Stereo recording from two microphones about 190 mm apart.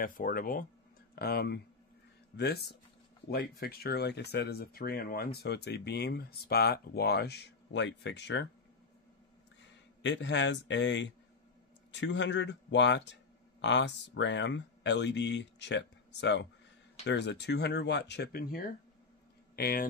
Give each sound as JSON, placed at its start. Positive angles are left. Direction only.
{"t": 0.0, "sound": "speech", "side_deg": 45}
{"t": 10.0, "sound": "a man's voice", "side_deg": 65}